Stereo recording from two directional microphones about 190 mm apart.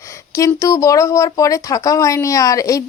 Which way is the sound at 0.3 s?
15° left (ahead or behind).